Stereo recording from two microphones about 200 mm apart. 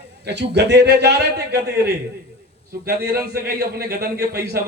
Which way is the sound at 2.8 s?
50° right (ahead or behind).